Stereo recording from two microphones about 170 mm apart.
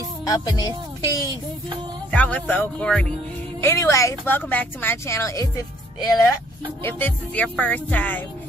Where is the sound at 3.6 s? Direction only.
15° left (ahead or behind).